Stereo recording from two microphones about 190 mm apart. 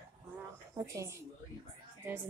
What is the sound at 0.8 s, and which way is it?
Speech, 15° right (ahead or behind).